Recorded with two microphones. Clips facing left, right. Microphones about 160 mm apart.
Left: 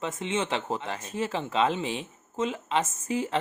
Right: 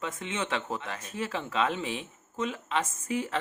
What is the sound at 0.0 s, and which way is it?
Speech, 25° left (ahead or behind).